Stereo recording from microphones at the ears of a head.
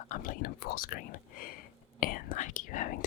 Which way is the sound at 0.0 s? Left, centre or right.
Left.